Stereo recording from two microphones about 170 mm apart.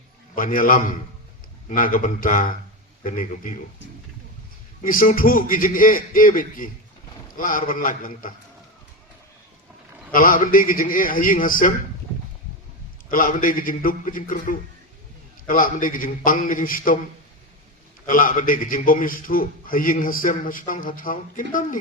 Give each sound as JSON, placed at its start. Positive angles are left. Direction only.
{"t": 0.3, "sound": "a man's voice", "side_deg": 55}
{"t": 4.8, "sound": "a man's voice", "side_deg": 55}
{"t": 10.1, "sound": "a man's voice", "side_deg": 55}
{"t": 13.1, "sound": "a man's voice", "side_deg": 55}
{"t": 18.0, "sound": "a man's voice", "side_deg": 55}